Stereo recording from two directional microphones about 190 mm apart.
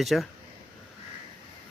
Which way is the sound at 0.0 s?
Centre (ahead or behind).